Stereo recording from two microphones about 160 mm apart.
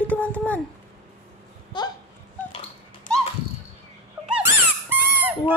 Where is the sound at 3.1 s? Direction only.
55° left (ahead or behind).